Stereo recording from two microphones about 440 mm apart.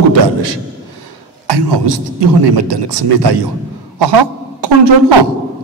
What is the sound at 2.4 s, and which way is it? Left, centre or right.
A woman's voice, right.